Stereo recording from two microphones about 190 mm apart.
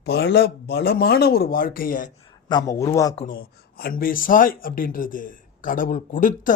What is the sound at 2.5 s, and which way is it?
Speech, 20° left (ahead or behind).